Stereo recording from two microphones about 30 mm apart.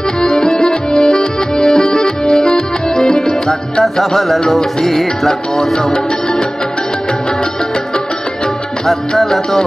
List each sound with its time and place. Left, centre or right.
0.2 s accordion: left
4.1 s music: centre
9.2 s music: centre